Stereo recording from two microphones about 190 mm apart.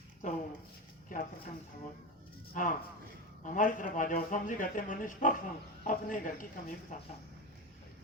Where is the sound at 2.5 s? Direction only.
45° left (ahead or behind).